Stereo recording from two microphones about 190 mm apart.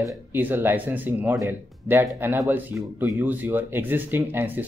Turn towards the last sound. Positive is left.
turn(degrees=-10)  # may be behind; listen again after turning